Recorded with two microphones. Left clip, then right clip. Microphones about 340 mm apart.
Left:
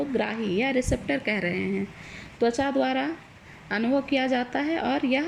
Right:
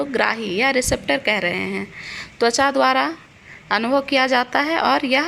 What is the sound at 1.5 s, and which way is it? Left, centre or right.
Speech, right.